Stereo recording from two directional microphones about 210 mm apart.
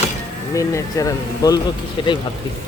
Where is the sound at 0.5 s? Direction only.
15° left (ahead or behind).